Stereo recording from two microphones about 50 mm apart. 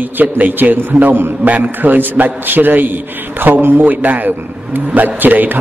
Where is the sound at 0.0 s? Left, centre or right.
Right.